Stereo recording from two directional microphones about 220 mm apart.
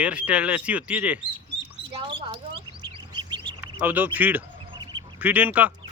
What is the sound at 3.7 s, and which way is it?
Speech, 10° right (ahead or behind).